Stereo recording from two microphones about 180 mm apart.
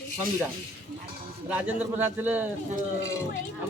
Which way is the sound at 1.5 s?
10° right (ahead or behind).